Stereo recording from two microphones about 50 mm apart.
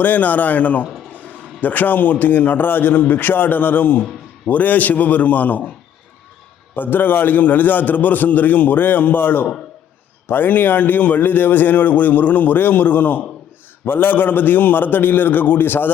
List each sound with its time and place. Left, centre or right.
0.0 s speech: left
6.7 s a man's voice: left